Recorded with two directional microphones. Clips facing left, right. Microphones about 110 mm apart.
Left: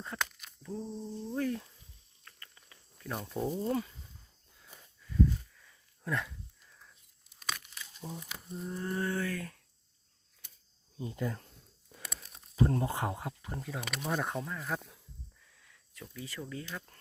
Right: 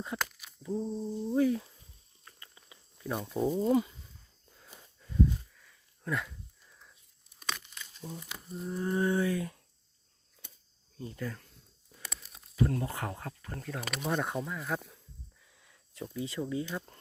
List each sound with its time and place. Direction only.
0.0 s speech: 5° right (ahead or behind)
2.2 s a sound: 15° right (ahead or behind)
3.2 s speech: centre (ahead or behind)
3.5 s speech: 20° right (ahead or behind)
5.5 s a sound: centre (ahead or behind)
7.4 s crumpling: 5° left (ahead or behind)
8.8 s speech: 15° right (ahead or behind)
10.9 s speech: 20° left (ahead or behind)
12.0 s a sound: centre (ahead or behind)
12.5 s speech: 30° left (ahead or behind); by 15.0 s centre (ahead or behind)
15.5 s speech: 20° right (ahead or behind)